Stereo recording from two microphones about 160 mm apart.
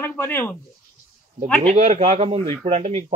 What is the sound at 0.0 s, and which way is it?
Speech, 15° left (ahead or behind).